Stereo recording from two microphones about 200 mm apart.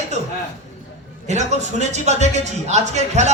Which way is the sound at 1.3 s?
35° right (ahead or behind).